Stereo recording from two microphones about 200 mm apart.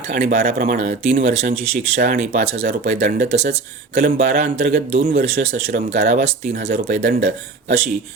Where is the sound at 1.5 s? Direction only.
45° right (ahead or behind).